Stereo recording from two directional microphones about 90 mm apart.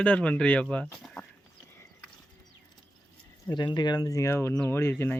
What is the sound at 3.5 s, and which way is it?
Speech, 55° left (ahead or behind).